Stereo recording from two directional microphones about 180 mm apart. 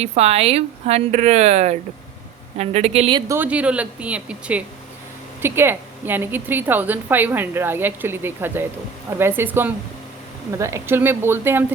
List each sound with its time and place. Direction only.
0.0 s speech: 35° right (ahead or behind)
3.3 s a woman's voice: 10° right (ahead or behind)